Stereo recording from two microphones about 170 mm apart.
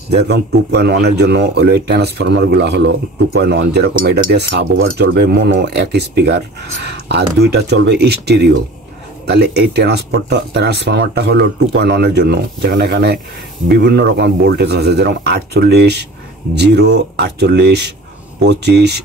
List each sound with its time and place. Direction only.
0.1 s speech: 75° right (ahead or behind)